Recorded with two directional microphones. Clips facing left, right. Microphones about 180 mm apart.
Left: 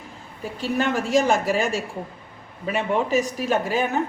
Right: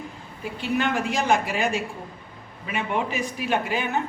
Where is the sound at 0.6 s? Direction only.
40° left (ahead or behind).